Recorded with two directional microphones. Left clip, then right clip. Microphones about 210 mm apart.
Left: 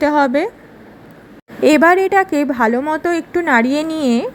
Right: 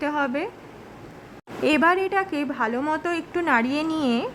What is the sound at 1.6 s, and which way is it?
Speech, 20° left (ahead or behind).